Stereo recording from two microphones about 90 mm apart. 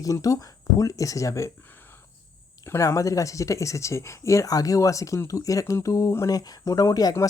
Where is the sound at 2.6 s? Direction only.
35° left (ahead or behind).